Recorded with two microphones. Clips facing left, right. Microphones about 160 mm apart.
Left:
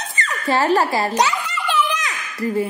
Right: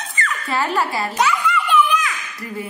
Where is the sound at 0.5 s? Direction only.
40° left (ahead or behind).